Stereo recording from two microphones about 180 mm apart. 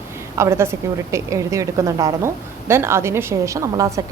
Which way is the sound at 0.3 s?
15° right (ahead or behind).